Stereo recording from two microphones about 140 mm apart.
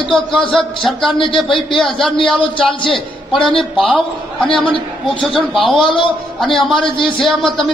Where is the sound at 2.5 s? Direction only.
40° left (ahead or behind).